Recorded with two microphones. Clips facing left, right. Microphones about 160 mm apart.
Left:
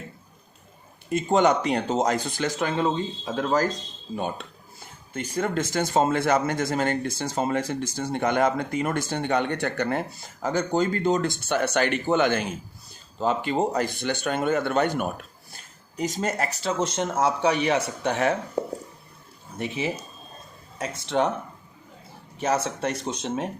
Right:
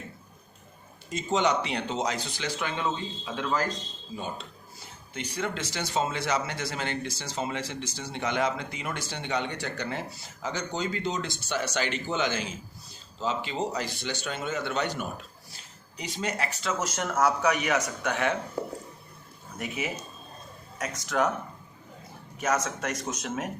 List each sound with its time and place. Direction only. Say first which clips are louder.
1.1 s speech: left 6 dB; 50° left (ahead or behind)
4.1 s speech: left 6 dB; 55° left (ahead or behind); by 18.3 s 35° left (ahead or behind)
18.6 s speech: left 5 dB; 20° left (ahead or behind)
22.4 s speech: left 3 dB; 30° left (ahead or behind)